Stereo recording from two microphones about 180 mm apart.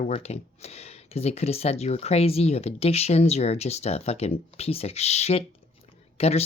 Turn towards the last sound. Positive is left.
turn(degrees=35)  # may be behind; listen again after turning